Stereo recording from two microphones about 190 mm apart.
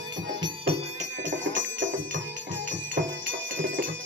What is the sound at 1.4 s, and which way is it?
Music, 75° right (ahead or behind).